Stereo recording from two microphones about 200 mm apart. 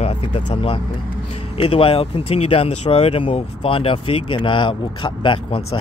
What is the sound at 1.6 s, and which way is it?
Speech, 25° left (ahead or behind).